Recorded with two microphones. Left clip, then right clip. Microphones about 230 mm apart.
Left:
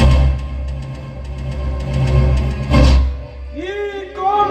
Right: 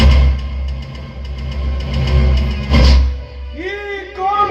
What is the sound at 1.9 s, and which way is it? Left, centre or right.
Music, left.